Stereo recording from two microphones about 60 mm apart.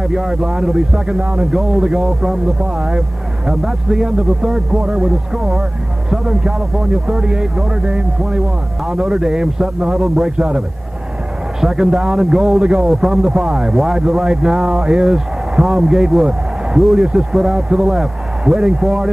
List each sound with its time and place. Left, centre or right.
0.1 s speech: centre
10.3 s speech: centre
11.6 s speech: centre